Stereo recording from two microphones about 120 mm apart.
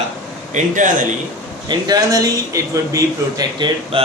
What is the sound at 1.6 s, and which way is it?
A man's voice, 35° right (ahead or behind).